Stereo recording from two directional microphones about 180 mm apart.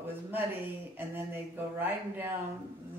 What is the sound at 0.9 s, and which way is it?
Speech, 10° right (ahead or behind).